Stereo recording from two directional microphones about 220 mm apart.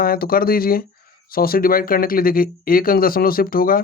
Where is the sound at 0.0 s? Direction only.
40° left (ahead or behind).